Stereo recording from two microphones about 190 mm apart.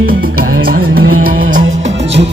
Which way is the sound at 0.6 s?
55° right (ahead or behind).